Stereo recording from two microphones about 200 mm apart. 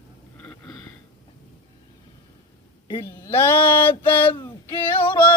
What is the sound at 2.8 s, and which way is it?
Speech, 15° left (ahead or behind).